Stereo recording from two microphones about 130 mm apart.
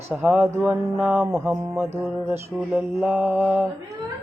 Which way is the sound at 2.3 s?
10° right (ahead or behind).